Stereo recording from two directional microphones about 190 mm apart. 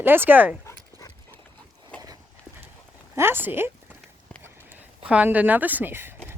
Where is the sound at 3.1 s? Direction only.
10° right (ahead or behind).